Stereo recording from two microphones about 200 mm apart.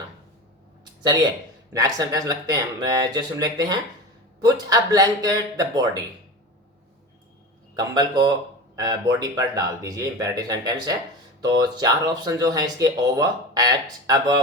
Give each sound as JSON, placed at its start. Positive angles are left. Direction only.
{"t": 1.7, "sound": "speech", "side_deg": -15}
{"t": 7.8, "sound": "speech", "side_deg": -20}